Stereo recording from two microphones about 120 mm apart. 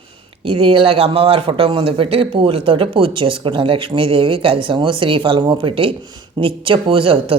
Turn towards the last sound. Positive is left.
turn(degrees=-50)  # may be behind; listen again after turning